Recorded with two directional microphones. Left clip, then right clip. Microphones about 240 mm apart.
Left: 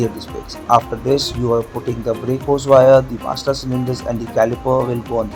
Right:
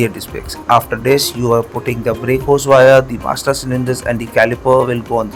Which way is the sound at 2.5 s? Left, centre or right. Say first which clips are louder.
Right 2 dB; right.